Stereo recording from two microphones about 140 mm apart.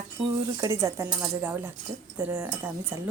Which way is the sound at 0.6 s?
20° right (ahead or behind).